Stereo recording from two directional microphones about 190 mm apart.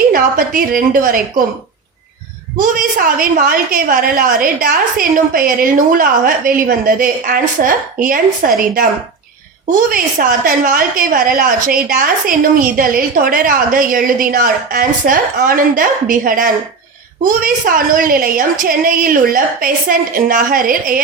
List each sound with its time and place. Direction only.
0.1 s a woman's voice: 50° right (ahead or behind)
2.6 s a woman's voice: 45° right (ahead or behind)
9.9 s a woman's voice: 50° right (ahead or behind)